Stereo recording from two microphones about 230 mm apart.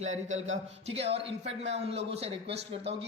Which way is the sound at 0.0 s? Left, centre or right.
Right.